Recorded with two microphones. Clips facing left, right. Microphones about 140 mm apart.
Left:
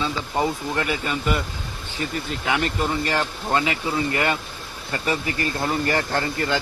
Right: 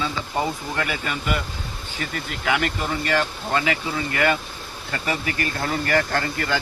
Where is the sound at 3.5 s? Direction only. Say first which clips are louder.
Left 2 dB; 30° left (ahead or behind).